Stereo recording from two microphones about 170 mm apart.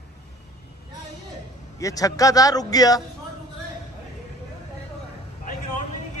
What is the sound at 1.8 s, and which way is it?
A man's voice, 20° left (ahead or behind).